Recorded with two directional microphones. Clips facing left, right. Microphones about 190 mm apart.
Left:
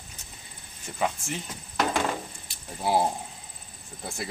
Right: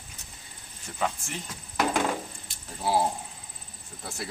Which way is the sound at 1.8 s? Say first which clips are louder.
Even; 5° right (ahead or behind).